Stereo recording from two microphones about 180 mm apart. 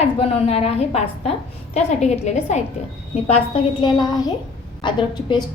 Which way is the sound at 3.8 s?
25° left (ahead or behind).